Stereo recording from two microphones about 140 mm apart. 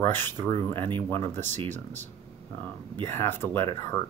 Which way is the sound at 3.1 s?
15° left (ahead or behind).